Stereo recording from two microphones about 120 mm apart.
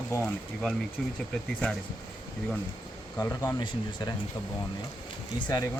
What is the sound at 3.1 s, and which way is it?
Speech, 20° left (ahead or behind).